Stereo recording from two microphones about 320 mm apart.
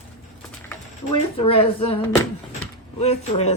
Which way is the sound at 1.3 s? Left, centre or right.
Centre.